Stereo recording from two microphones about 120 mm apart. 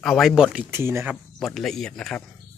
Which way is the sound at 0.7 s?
20° right (ahead or behind).